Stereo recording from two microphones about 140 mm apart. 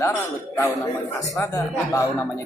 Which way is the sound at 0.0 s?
20° left (ahead or behind).